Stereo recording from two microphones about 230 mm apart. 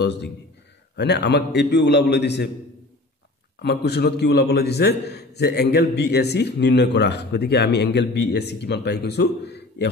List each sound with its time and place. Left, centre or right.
0.0 s a man's voice: left
3.6 s a man's voice: left